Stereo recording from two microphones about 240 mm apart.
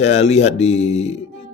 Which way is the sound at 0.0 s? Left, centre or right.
Left.